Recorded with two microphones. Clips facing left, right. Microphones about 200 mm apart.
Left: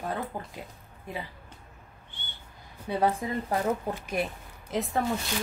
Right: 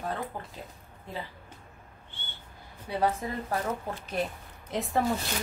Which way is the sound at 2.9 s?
20° left (ahead or behind).